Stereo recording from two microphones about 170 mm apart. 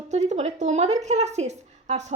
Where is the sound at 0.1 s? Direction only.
40° right (ahead or behind).